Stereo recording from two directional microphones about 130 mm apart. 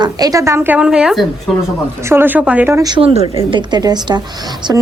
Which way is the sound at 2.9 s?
45° right (ahead or behind).